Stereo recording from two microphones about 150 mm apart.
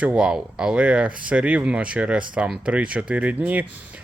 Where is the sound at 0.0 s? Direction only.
5° right (ahead or behind).